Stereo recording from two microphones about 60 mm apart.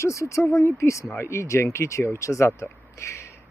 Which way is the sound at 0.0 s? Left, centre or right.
Left.